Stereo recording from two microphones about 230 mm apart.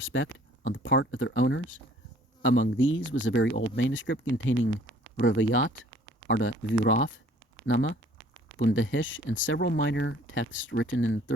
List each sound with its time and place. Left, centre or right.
0.0 s speech: left